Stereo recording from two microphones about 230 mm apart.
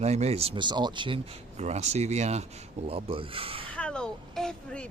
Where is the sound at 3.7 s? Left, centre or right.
Centre.